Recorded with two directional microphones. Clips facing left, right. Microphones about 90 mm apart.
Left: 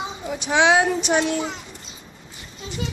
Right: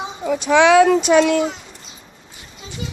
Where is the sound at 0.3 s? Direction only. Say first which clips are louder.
Right 6 dB; 50° right (ahead or behind); by 1.4 s 80° right.